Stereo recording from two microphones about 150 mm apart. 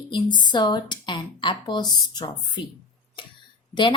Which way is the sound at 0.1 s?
30° left (ahead or behind).